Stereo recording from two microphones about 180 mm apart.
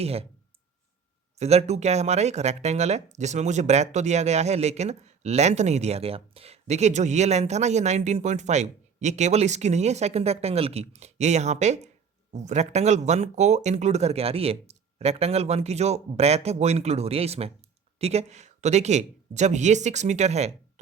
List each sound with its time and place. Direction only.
0.0 s speech: 35° right (ahead or behind)
1.4 s speech: 35° right (ahead or behind)